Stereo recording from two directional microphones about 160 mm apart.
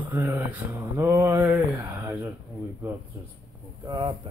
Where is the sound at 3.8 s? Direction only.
30° right (ahead or behind).